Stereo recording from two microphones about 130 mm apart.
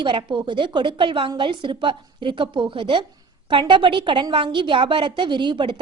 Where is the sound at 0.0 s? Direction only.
40° right (ahead or behind).